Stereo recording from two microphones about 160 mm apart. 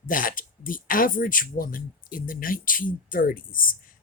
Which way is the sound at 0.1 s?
60° left (ahead or behind).